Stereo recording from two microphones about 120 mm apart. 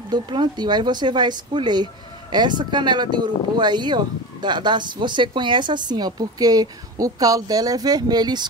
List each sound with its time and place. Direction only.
0.1 s speech: 40° right (ahead or behind)